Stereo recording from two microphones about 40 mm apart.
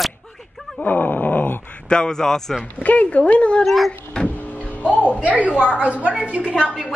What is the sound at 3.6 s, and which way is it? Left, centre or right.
Speech, centre.